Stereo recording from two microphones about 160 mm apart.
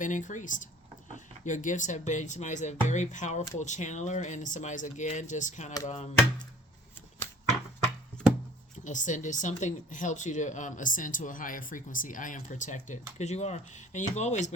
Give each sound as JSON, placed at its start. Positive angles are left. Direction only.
{"t": 0.0, "sound": "speech", "side_deg": 50}
{"t": 8.8, "sound": "speech", "side_deg": 50}